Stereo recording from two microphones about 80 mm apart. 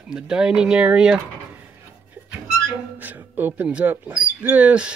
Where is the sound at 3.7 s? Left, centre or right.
Centre.